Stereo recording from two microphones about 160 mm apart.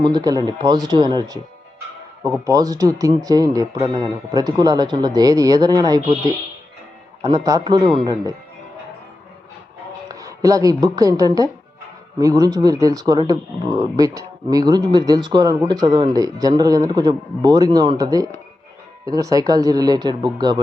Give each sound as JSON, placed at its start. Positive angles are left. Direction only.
{"t": 0.0, "sound": "speech", "side_deg": -25}
{"t": 2.5, "sound": "speech", "side_deg": -20}
{"t": 7.2, "sound": "speech", "side_deg": -25}
{"t": 10.1, "sound": "a woman's voice", "side_deg": -20}